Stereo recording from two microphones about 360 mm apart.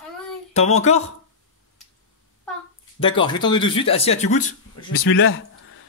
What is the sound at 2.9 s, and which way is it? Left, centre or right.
Speech, centre.